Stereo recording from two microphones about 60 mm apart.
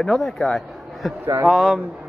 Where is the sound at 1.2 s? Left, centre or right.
Right.